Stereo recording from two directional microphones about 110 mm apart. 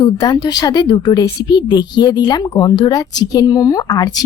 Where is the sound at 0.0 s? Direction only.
40° left (ahead or behind).